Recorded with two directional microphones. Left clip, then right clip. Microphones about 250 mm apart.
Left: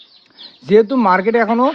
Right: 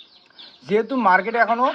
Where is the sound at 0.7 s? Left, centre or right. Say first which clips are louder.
Left 5 dB; left.